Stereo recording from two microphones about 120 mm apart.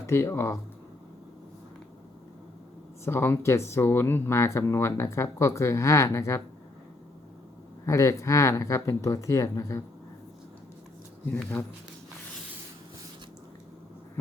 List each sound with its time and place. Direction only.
0.1 s speech: 20° left (ahead or behind)
3.0 s speech: 20° left (ahead or behind)
7.9 s speech: 25° left (ahead or behind)
11.6 s speech: 15° left (ahead or behind)